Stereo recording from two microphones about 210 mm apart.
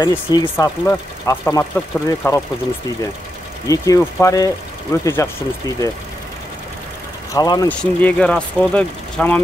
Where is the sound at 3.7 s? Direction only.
15° left (ahead or behind).